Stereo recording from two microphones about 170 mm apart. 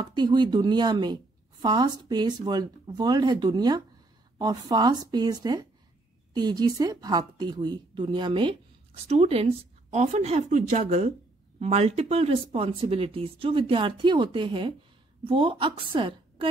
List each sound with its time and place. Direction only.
0.0 s a woman's voice: 25° right (ahead or behind)